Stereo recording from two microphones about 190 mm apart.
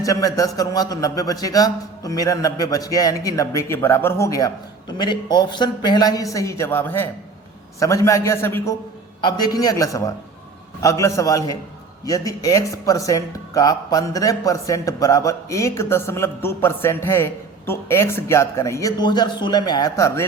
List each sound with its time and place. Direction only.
0.0 s a man's voice: 20° left (ahead or behind)